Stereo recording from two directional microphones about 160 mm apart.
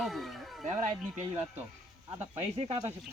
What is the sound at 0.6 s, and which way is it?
Speech, 45° right (ahead or behind).